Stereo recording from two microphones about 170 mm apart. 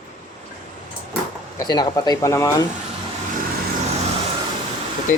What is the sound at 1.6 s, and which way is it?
Speech, 20° left (ahead or behind).